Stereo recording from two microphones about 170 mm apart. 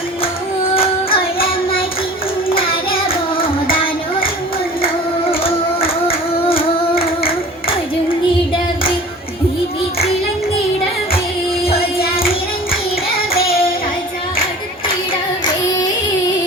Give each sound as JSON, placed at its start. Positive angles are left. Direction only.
{"t": 0.7, "sound": "child singing", "side_deg": 35}
{"t": 5.2, "sound": "music", "side_deg": 35}
{"t": 6.9, "sound": "singing", "side_deg": 60}
{"t": 11.7, "sound": "music", "side_deg": 35}